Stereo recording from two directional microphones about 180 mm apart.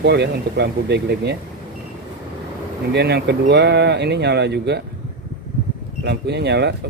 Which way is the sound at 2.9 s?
70° right (ahead or behind).